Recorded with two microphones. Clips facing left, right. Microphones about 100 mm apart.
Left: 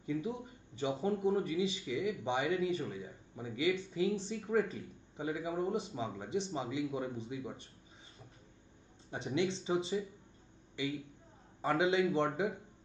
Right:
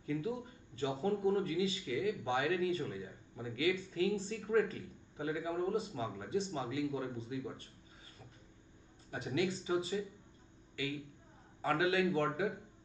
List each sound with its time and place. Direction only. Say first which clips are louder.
0.0 s a man's voice: even; 20° left (ahead or behind)
9.1 s a man's voice: left 1 dB; 25° left (ahead or behind)
11.6 s a man's voice: left 2 dB; 20° left (ahead or behind)